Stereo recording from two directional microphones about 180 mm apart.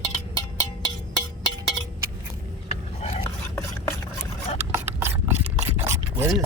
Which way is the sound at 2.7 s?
35° left (ahead or behind).